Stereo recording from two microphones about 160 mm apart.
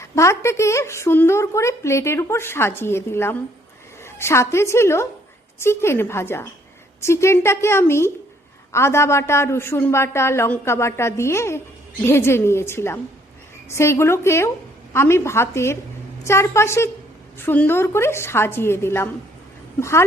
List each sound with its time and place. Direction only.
0.0 s a woman's voice: 15° left (ahead or behind)